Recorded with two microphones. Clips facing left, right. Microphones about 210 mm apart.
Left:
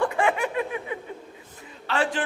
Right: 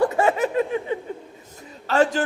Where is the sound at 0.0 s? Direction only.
40° right (ahead or behind).